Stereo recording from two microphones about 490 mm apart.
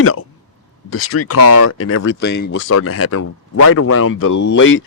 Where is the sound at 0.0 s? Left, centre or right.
Left.